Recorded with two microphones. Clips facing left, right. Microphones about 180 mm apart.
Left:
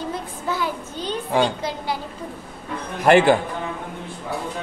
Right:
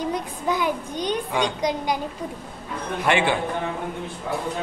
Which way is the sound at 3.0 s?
40° left (ahead or behind).